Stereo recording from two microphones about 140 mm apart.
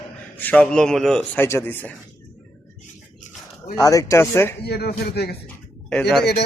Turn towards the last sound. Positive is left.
turn(degrees=5)  # may be behind; listen again after turning